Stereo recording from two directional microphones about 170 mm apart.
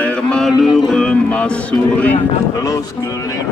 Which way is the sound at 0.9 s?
5° left (ahead or behind).